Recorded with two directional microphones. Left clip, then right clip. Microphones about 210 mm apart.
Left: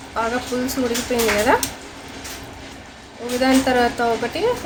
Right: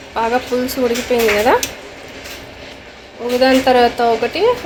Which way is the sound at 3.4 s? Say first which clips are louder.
Right 6 dB; 5° right (ahead or behind).